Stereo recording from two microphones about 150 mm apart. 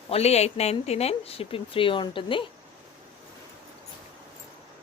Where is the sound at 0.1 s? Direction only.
45° left (ahead or behind).